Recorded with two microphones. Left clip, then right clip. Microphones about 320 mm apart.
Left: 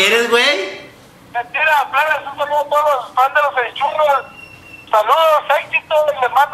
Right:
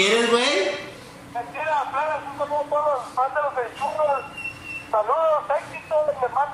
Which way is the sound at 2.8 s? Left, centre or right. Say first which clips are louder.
Left 10 dB; left.